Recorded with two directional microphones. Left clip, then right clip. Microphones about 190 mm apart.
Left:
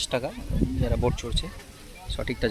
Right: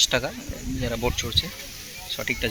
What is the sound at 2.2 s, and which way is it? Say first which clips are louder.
Speech: right 1 dB; 25° left (ahead or behind).